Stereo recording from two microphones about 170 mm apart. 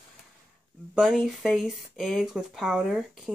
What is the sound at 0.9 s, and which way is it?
Speech, centre (ahead or behind).